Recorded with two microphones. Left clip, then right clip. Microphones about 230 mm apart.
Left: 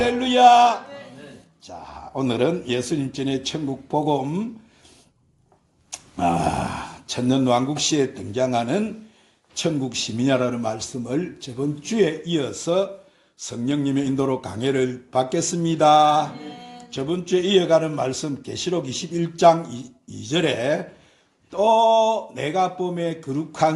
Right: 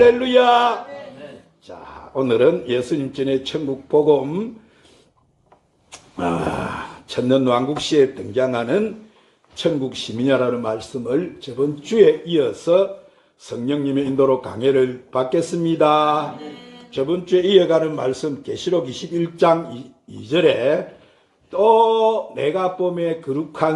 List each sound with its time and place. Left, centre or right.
0.0 s speech: left
1.8 s speech: left
6.1 s speech: left
10.2 s a man's voice: left